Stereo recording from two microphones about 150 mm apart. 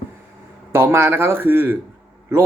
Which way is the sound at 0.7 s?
15° right (ahead or behind).